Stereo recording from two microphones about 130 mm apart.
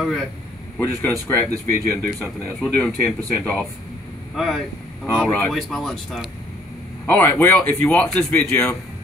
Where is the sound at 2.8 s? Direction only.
10° left (ahead or behind).